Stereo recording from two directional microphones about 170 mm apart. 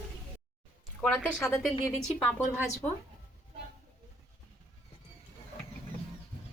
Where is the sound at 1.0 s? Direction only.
5° left (ahead or behind).